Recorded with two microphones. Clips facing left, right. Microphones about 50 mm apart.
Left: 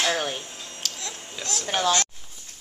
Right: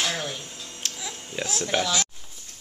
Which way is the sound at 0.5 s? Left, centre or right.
Left.